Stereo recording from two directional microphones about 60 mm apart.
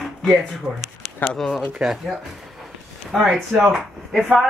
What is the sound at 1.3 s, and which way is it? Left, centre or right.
Speech, centre.